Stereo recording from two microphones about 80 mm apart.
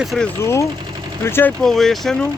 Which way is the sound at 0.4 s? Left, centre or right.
Left.